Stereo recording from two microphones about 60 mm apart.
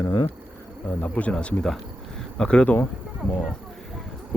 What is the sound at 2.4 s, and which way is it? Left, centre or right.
Speech, centre.